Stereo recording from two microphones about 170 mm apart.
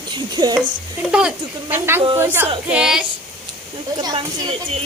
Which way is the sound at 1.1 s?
10° right (ahead or behind).